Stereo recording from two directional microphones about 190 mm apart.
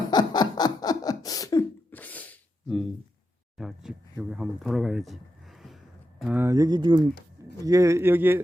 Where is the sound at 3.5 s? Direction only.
Centre (ahead or behind).